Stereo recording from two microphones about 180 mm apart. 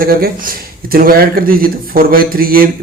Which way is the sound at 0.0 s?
55° right (ahead or behind).